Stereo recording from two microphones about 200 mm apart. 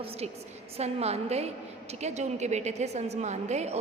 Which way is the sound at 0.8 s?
30° right (ahead or behind).